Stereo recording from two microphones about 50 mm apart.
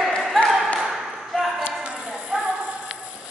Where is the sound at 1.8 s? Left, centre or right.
Right.